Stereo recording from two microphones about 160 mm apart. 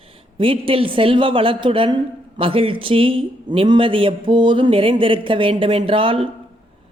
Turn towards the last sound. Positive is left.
turn(degrees=-35)  # may be behind; listen again after turning